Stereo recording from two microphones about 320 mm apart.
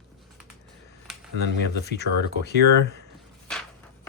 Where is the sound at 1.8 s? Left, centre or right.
Left.